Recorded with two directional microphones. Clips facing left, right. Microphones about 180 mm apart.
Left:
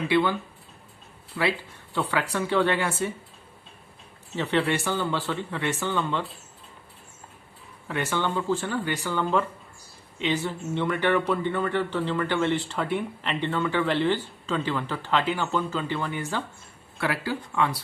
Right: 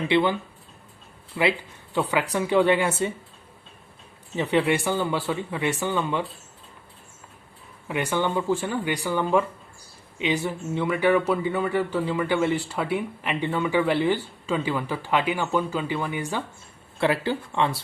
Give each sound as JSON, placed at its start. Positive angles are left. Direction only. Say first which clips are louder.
{"t": 0.1, "sound": "speech", "louder": "right 2 dB", "side_deg": -15}
{"t": 1.4, "sound": "speech", "louder": "right 3 dB", "side_deg": -15}
{"t": 4.4, "sound": "speech", "louder": "right 3 dB", "side_deg": -10}
{"t": 7.9, "sound": "speech", "louder": "right 2 dB", "side_deg": -15}
{"t": 17.0, "sound": "speech", "louder": "right 5 dB", "side_deg": -25}